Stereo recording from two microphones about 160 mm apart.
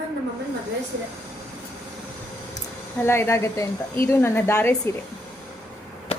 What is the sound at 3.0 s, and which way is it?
Speech, 15° left (ahead or behind).